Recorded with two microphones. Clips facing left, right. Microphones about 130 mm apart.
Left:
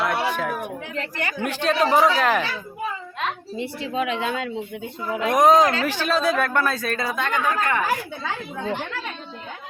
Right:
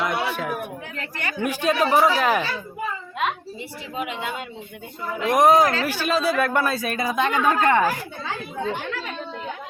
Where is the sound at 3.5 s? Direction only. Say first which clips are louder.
Left 5 dB; 90° left.